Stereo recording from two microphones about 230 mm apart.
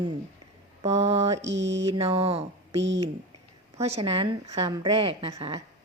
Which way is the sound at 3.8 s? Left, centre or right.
Right.